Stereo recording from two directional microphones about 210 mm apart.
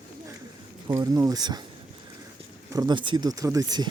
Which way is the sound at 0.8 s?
15° right (ahead or behind).